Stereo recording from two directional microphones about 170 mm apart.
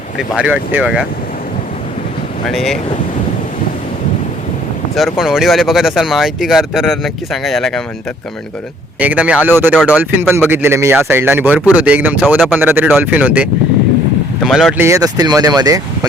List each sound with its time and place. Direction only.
0.3 s speech: 10° right (ahead or behind)
2.5 s speech: centre (ahead or behind)
4.9 s speech: centre (ahead or behind)
9.0 s speech: 10° right (ahead or behind)
14.8 s speech: 15° right (ahead or behind)